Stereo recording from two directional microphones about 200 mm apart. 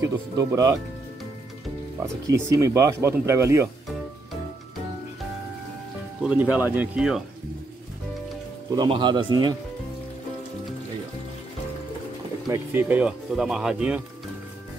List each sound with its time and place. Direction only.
0.0 s speech: 15° right (ahead or behind)
2.4 s speech: 15° right (ahead or behind)
6.2 s speech: 5° right (ahead or behind)
8.7 s speech: 25° right (ahead or behind)
12.4 s speech: 10° right (ahead or behind)